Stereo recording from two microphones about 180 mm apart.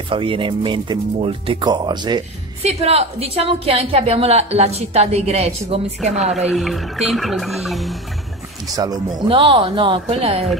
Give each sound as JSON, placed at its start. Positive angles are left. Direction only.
{"t": 0.1, "sound": "speech", "side_deg": -30}
{"t": 2.6, "sound": "a woman's voice", "side_deg": -35}
{"t": 6.3, "sound": "speech", "side_deg": 0}
{"t": 8.7, "sound": "speech", "side_deg": -20}